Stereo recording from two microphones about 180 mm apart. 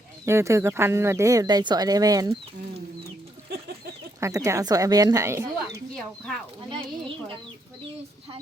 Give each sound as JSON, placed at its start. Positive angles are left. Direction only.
{"t": 0.3, "sound": "speech", "side_deg": -15}
{"t": 3.5, "sound": "a sound", "side_deg": -60}
{"t": 4.2, "sound": "a woman's voice", "side_deg": -20}
{"t": 5.9, "sound": "speech", "side_deg": 5}